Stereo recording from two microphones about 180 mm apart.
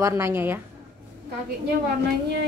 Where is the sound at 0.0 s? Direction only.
15° right (ahead or behind).